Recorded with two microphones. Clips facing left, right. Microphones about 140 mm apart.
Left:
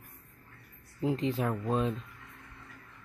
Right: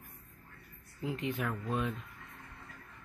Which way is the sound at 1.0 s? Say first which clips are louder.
Left 6 dB; 30° left (ahead or behind).